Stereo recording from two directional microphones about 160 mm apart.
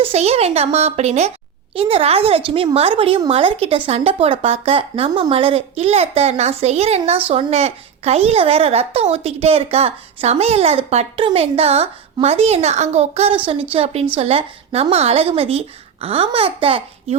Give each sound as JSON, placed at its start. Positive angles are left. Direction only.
{"t": 0.0, "sound": "speech", "side_deg": -40}